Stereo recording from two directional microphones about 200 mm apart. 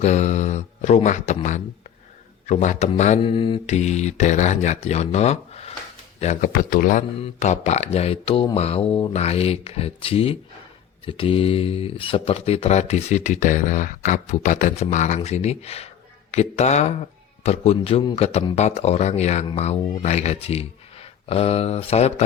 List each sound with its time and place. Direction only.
0.0 s speech: 35° left (ahead or behind)